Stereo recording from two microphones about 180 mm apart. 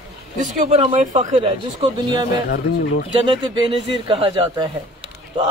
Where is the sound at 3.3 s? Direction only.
25° right (ahead or behind).